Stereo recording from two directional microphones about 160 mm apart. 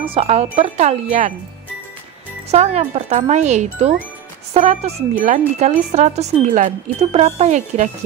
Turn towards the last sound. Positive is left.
turn(degrees=-45)  # may be behind; listen again after turning